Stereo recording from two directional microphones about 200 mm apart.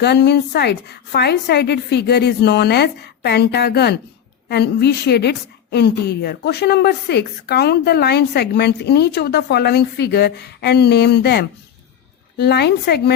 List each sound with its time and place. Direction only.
0.0 s a woman's voice: 55° left (ahead or behind)